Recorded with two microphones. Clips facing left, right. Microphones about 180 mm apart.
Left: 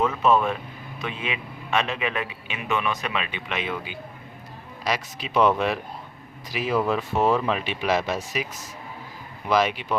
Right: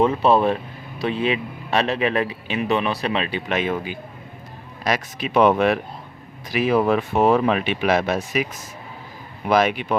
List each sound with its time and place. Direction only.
0.0 s a man's voice: 35° right (ahead or behind)
4.8 s speech: 50° right (ahead or behind)
9.5 s speech: 55° right (ahead or behind)